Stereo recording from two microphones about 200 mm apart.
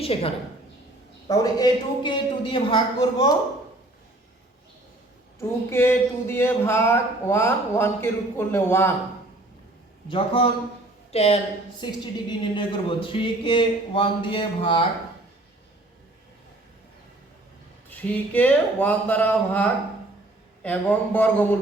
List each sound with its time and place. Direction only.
0.0 s a woman's voice: 30° left (ahead or behind)
1.3 s a woman's voice: 20° left (ahead or behind)
5.7 s speech: 10° left (ahead or behind)
10.1 s a woman's voice: 25° left (ahead or behind)
17.8 s speech: 10° left (ahead or behind)